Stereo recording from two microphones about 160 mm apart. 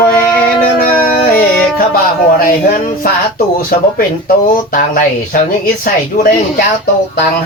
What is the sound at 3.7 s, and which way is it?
Speech, 65° left (ahead or behind).